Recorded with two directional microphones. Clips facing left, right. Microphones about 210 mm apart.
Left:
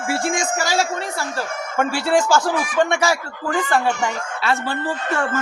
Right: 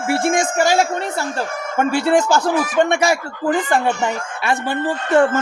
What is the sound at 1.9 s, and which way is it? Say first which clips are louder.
Speech: right 3 dB; 20° right (ahead or behind).